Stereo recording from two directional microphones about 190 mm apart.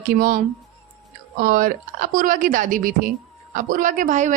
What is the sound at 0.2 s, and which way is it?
A woman's voice, 50° right (ahead or behind).